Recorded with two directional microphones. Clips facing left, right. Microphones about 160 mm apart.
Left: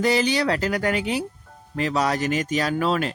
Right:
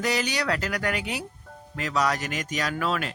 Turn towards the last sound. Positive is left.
turn(degrees=30)  # may be behind; listen again after turning